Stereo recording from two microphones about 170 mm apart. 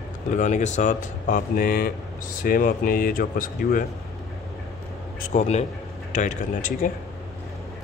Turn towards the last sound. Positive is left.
turn(degrees=50)  # may be behind; listen again after turning